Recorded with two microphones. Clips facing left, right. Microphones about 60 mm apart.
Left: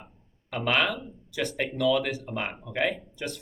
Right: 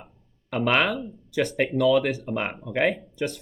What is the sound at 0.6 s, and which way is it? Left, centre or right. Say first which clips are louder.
Speech: right 3 dB; right.